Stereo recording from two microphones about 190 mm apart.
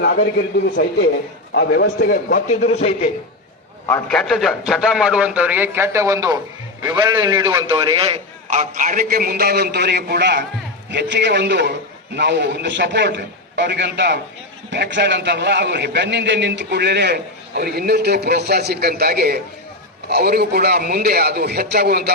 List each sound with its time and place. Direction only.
0.0 s a man's voice: 60° left (ahead or behind); by 3.1 s 35° left (ahead or behind)
3.8 s a man's voice: 10° left (ahead or behind); by 8.6 s 25° right (ahead or behind)
8.7 s a man's voice: 45° right (ahead or behind)